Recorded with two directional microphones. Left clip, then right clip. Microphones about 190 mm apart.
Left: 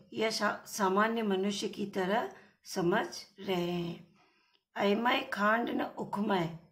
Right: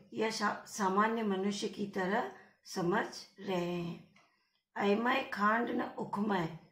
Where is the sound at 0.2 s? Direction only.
35° left (ahead or behind).